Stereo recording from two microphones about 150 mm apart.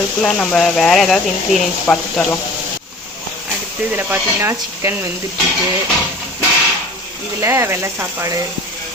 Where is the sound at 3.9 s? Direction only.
15° right (ahead or behind).